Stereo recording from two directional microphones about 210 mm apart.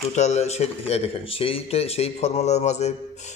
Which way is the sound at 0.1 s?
35° left (ahead or behind).